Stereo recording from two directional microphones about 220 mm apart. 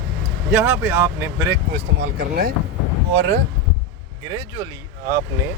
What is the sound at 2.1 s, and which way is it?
Speech, 45° right (ahead or behind).